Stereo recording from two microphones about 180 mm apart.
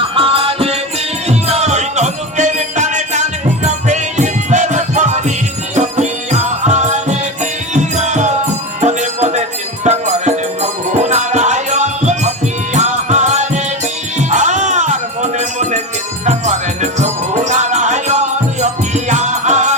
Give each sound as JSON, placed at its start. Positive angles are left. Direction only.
{"t": 0.0, "sound": "music", "side_deg": -30}